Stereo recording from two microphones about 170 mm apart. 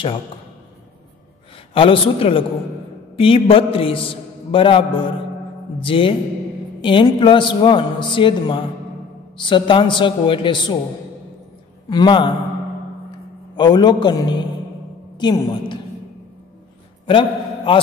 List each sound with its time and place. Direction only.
1.7 s a man's voice: 30° left (ahead or behind)
11.9 s a man's voice: 25° left (ahead or behind)
13.6 s a man's voice: 25° left (ahead or behind)
17.0 s a sound: 30° left (ahead or behind)